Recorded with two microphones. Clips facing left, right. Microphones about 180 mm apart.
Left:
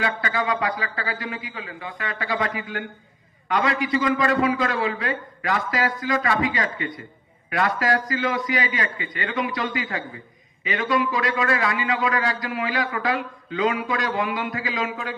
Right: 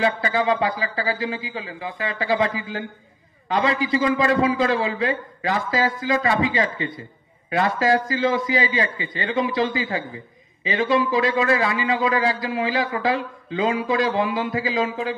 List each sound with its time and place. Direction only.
0.0 s a man's voice: 25° right (ahead or behind)